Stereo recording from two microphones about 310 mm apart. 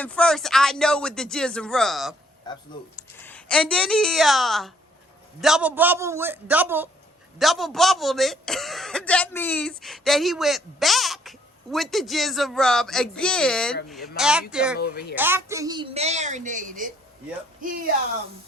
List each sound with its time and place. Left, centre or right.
0.0 s a man's voice: centre
14.8 s speech: left
15.1 s a woman's voice: centre; by 16.8 s right